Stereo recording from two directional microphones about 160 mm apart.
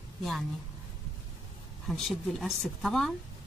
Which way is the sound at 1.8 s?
Centre (ahead or behind).